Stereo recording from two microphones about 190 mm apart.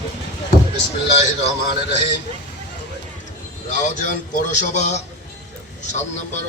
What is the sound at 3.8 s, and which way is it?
A man's voice, 40° left (ahead or behind).